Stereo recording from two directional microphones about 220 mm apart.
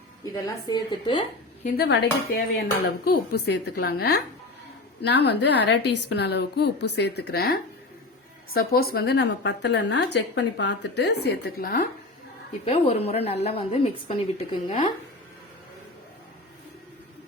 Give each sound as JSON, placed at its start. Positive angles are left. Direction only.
{"t": 0.7, "sound": "a woman's voice", "side_deg": 20}
{"t": 1.6, "sound": "a woman's voice", "side_deg": 45}
{"t": 12.6, "sound": "a woman's voice", "side_deg": 25}